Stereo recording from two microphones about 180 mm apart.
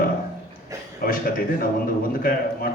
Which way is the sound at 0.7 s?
20° right (ahead or behind).